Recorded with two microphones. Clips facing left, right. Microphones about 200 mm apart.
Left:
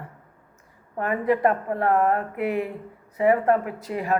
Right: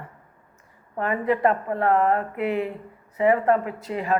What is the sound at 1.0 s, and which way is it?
A woman's voice, 45° left (ahead or behind).